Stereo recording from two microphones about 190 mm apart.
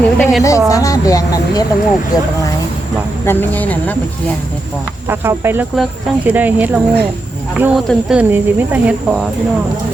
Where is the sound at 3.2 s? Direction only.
10° left (ahead or behind).